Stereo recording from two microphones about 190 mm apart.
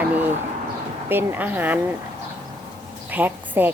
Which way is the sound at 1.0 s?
10° right (ahead or behind).